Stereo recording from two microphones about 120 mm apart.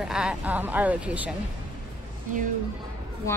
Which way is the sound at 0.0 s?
5° right (ahead or behind).